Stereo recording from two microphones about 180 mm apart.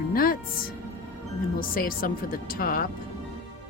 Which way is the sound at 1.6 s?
50° left (ahead or behind).